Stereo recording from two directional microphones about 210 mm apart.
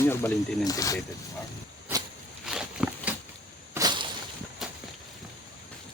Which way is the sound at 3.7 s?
20° right (ahead or behind).